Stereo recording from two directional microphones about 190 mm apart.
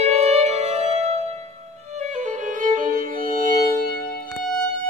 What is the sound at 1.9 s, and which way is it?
Music, 40° right (ahead or behind).